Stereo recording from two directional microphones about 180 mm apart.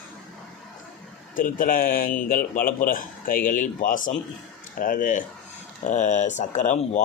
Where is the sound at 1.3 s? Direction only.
50° left (ahead or behind).